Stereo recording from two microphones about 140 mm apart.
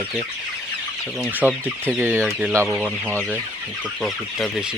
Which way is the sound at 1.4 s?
10° right (ahead or behind).